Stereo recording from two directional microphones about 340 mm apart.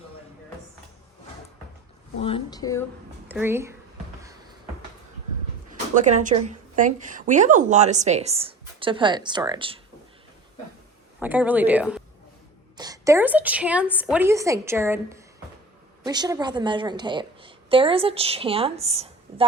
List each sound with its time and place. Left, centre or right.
2.2 s speech: centre
3.2 s a woman's voice: centre
5.9 s a woman's voice: right
11.2 s a woman's voice: centre